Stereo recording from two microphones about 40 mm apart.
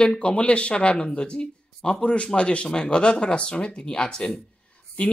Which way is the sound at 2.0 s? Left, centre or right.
Left.